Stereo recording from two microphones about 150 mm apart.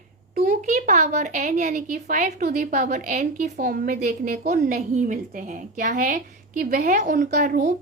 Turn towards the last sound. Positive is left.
turn(degrees=-55)  # may be behind; listen again after turning